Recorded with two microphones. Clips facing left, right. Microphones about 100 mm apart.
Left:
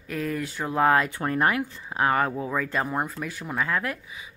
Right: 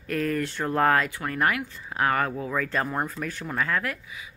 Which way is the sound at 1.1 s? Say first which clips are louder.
Left 2 dB; 25° left (ahead or behind).